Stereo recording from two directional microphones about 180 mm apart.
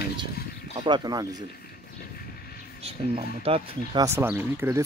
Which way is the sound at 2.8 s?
35° right (ahead or behind).